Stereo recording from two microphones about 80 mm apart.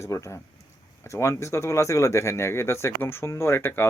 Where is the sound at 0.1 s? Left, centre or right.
Left.